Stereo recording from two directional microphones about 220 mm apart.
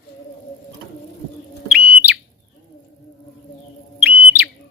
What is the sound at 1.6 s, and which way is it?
Bird, 5° right (ahead or behind).